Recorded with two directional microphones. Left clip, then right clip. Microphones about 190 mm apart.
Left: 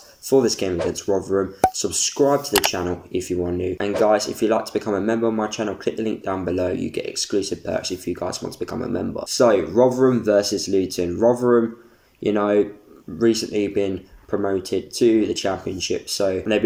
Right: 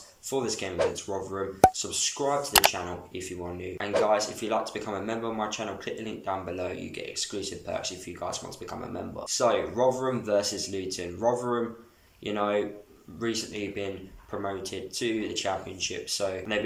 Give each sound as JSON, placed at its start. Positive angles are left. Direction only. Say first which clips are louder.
{"t": 0.3, "sound": "speech", "louder": "left 12 dB", "side_deg": 35}
{"t": 2.5, "sound": "speech", "louder": "left 2 dB", "side_deg": 0}
{"t": 3.1, "sound": "speech", "louder": "left 13 dB", "side_deg": 35}